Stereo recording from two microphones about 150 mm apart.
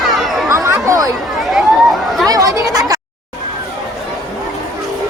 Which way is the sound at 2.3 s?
20° right (ahead or behind).